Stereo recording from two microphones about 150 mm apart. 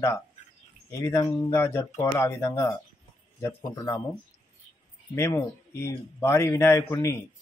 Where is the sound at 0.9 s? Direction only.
20° left (ahead or behind).